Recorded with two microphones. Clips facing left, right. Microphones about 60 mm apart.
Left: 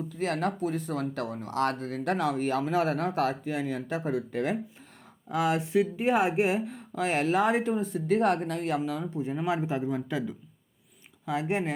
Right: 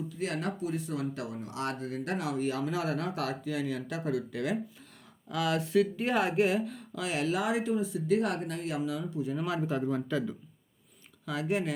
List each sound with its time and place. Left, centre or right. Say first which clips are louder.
0.1 s speech: left 7 dB; left
5.3 s speech: left 2 dB; left
9.4 s speech: left 4 dB; left
11.3 s speech: left 2 dB; left